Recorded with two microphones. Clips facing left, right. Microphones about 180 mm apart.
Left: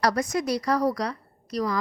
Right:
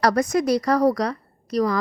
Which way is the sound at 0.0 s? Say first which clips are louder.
Right 5 dB; 45° right (ahead or behind).